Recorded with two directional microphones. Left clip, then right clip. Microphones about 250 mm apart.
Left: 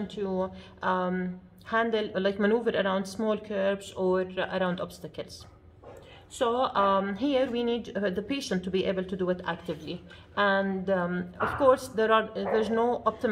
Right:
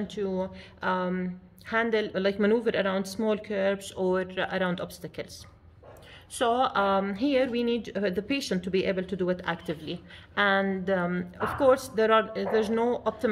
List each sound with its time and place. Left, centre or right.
0.1 s a woman's voice: right
6.3 s a woman's voice: right